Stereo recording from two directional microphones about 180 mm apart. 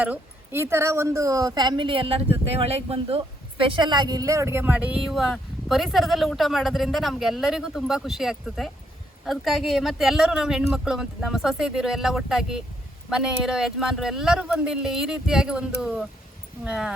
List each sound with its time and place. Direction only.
0.0 s a woman's voice: 10° right (ahead or behind)